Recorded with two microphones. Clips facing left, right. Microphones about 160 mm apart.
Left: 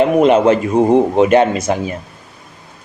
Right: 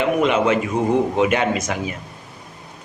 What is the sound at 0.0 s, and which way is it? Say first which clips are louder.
Speech: left 7 dB; 35° left (ahead or behind).